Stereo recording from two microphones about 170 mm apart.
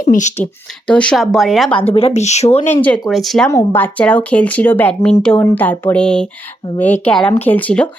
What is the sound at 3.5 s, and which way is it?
Speech, 15° left (ahead or behind).